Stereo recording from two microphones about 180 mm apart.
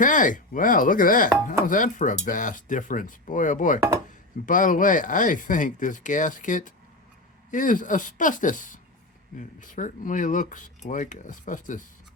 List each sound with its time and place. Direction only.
0.0 s speech: 45° left (ahead or behind)